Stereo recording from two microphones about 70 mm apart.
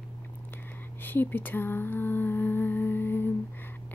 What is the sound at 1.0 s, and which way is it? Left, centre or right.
Humming, left.